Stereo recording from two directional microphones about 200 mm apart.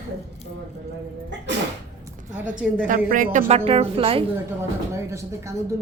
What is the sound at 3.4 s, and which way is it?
Speech, 30° right (ahead or behind).